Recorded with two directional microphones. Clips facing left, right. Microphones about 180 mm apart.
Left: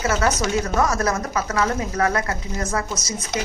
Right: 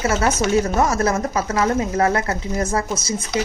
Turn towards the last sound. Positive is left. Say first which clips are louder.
# right 3 dB
turn(degrees=-30)  # may be behind; listen again after turning